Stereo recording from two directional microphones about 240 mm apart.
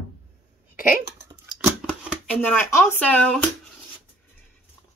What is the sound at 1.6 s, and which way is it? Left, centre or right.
Shuffling cards, centre.